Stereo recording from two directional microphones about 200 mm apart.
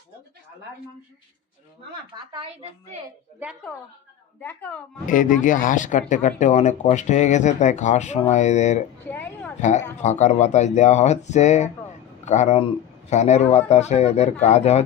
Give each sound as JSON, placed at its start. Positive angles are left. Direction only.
{"t": 2.1, "sound": "a woman's voice", "side_deg": -25}
{"t": 4.4, "sound": "speech", "side_deg": 10}
{"t": 5.0, "sound": "speech", "side_deg": 40}
{"t": 9.0, "sound": "speech", "side_deg": 10}
{"t": 9.6, "sound": "speech", "side_deg": 35}